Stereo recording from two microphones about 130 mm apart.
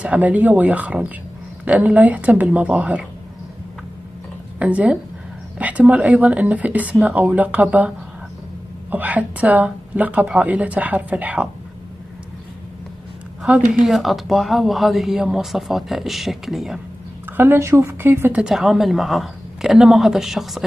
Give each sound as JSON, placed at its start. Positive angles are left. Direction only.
{"t": 0.0, "sound": "speech", "side_deg": -10}
{"t": 4.6, "sound": "speech", "side_deg": -10}
{"t": 8.9, "sound": "speech", "side_deg": -10}
{"t": 13.7, "sound": "speech", "side_deg": 0}
{"t": 17.4, "sound": "speech", "side_deg": -20}
{"t": 18.4, "sound": "speech", "side_deg": 0}